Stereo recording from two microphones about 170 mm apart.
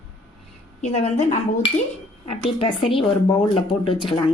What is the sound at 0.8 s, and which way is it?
Speech, 40° left (ahead or behind).